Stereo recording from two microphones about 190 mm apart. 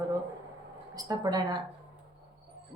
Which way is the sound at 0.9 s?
20° right (ahead or behind).